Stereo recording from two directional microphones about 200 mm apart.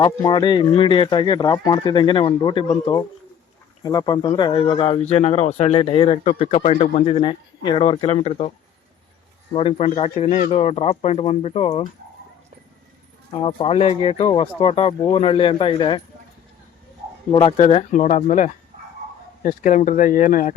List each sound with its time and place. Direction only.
0.0 s speech: 20° left (ahead or behind)
3.8 s speech: 20° left (ahead or behind)
9.6 s speech: 30° left (ahead or behind)
13.3 s speech: 25° left (ahead or behind)
17.3 s speech: 30° left (ahead or behind)